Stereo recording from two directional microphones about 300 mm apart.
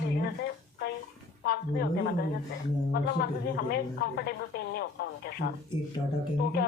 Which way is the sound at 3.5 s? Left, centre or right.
Left.